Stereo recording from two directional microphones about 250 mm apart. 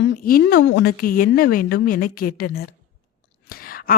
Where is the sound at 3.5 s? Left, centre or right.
Left.